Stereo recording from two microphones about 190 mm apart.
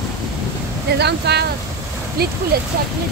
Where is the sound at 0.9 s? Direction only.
60° right (ahead or behind).